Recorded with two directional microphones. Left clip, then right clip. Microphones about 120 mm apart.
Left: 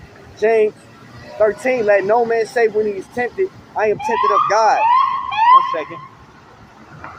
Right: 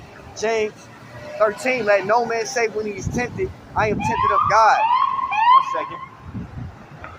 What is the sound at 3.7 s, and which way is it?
Speech, 50° right (ahead or behind).